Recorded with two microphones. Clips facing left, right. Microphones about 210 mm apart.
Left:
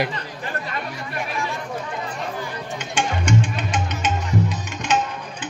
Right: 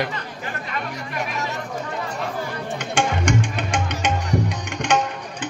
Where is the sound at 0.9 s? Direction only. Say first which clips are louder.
Even; 40° right (ahead or behind).